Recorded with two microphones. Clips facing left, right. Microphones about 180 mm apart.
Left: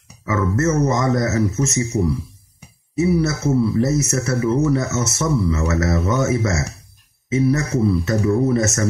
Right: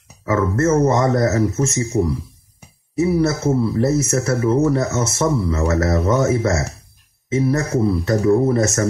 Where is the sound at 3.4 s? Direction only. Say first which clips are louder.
Even; 30° right (ahead or behind).